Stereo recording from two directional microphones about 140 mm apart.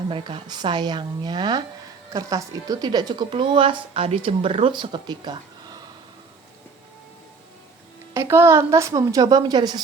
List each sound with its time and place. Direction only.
0.1 s speech: 35° right (ahead or behind)
8.1 s speech: 15° right (ahead or behind)